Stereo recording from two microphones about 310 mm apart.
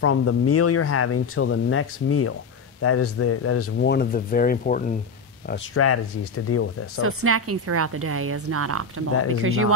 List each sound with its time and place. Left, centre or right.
0.0 s speech: left
5.8 s speech: left
7.0 s a woman's voice: right